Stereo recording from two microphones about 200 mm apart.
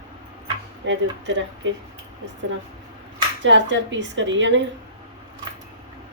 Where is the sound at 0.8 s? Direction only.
65° right (ahead or behind).